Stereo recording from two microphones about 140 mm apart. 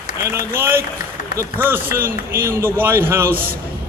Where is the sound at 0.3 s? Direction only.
15° right (ahead or behind).